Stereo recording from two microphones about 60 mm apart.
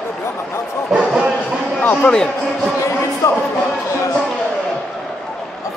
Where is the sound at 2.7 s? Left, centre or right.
Left.